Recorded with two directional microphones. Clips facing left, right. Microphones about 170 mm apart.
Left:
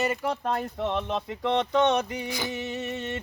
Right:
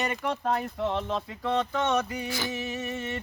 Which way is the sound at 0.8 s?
20° left (ahead or behind).